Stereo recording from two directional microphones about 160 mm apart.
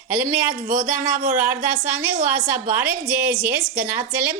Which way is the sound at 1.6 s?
55° right (ahead or behind).